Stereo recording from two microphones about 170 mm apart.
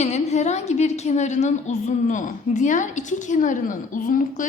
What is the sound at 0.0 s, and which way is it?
A woman's voice, 40° left (ahead or behind).